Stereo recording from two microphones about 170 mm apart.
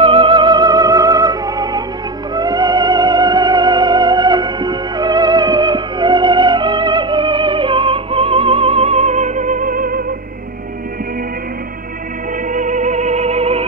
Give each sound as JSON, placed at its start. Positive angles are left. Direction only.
{"t": 0.0, "sound": "music", "side_deg": -30}
{"t": 12.4, "sound": "music", "side_deg": -50}